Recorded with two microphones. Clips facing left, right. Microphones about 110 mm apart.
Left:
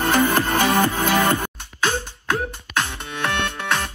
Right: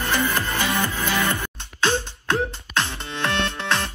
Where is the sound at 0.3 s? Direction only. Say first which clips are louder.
Left 5 dB; 60° left (ahead or behind).